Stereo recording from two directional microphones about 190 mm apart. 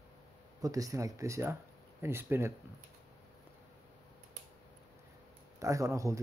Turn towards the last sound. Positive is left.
turn(degrees=-15)  # may be behind; listen again after turning